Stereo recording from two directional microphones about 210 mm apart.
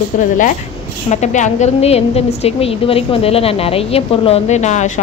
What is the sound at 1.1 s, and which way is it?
A woman's voice, 35° left (ahead or behind).